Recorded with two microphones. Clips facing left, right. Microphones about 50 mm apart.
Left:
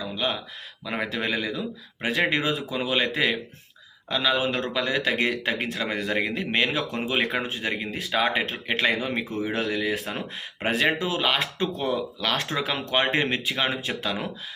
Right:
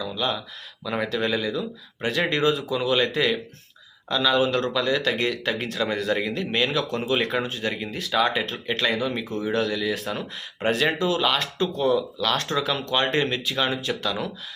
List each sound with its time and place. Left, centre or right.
0.0 s speech: centre
4.1 s speech: centre
8.4 s speech: left
9.3 s speech: centre
9.6 s speech: left
11.9 s speech: left
12.4 s speech: left